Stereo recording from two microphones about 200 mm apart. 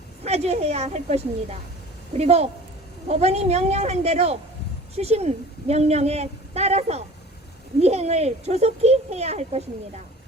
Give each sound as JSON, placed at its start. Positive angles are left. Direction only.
{"t": 0.3, "sound": "a woman's voice", "side_deg": -30}